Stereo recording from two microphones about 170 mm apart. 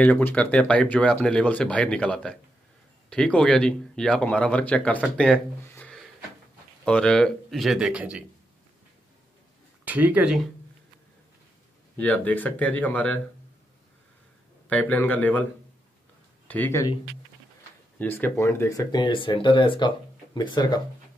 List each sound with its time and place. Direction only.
0.0 s speech: 10° left (ahead or behind); by 8.2 s 5° right (ahead or behind)
9.8 s speech: 10° right (ahead or behind)
12.0 s speech: 10° left (ahead or behind)
14.7 s speech: 10° left (ahead or behind)
16.4 s speech: 10° left (ahead or behind)
17.9 s speech: 10° left (ahead or behind)